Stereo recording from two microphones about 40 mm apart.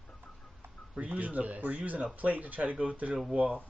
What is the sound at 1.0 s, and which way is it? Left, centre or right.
Speech, right.